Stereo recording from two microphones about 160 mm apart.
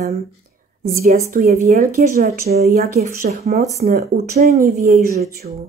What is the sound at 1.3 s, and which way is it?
Speech, 60° right (ahead or behind).